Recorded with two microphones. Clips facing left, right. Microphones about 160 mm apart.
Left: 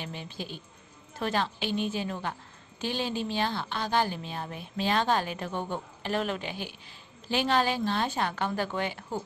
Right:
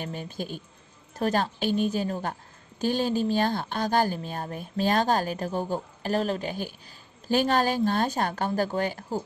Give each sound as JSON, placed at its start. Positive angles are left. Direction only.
{"t": 0.0, "sound": "a woman's voice", "side_deg": -45}